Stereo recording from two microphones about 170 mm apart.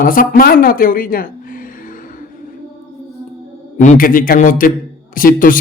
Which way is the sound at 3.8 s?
50° left (ahead or behind).